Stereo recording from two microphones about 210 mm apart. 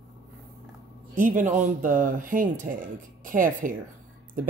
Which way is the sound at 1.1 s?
35° right (ahead or behind).